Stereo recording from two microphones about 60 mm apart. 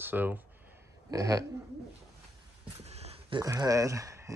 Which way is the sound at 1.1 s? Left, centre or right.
Right.